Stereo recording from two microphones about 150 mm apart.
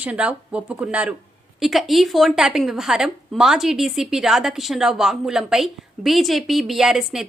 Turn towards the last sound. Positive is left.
turn(degrees=0)  # may be behind; listen again after turning